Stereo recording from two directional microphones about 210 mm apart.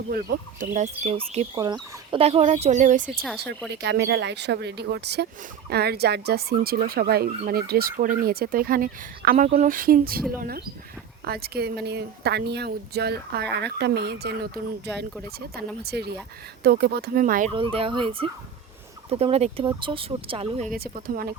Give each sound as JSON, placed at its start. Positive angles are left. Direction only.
{"t": 0.1, "sound": "speech", "side_deg": -45}
{"t": 3.8, "sound": "speech", "side_deg": -55}
{"t": 11.3, "sound": "speech", "side_deg": -45}
{"t": 17.5, "sound": "speech", "side_deg": -25}
{"t": 20.7, "sound": "speech", "side_deg": -45}